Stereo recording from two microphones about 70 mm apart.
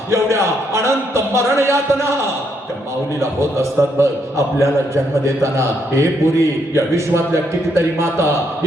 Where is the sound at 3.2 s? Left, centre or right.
Right.